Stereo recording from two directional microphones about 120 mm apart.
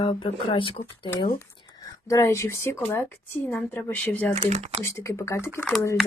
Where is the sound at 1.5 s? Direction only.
30° left (ahead or behind); by 4.3 s 15° left (ahead or behind).